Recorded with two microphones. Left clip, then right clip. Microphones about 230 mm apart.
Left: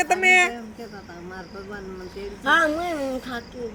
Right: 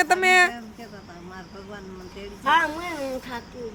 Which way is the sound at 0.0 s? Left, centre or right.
Centre.